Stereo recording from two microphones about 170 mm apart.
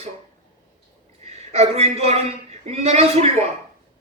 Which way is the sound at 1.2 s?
40° right (ahead or behind).